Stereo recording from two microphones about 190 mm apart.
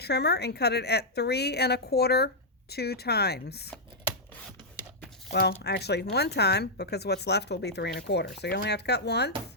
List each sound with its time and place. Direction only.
0.0 s a woman's voice: 60° left (ahead or behind)
5.3 s a woman's voice: 60° left (ahead or behind)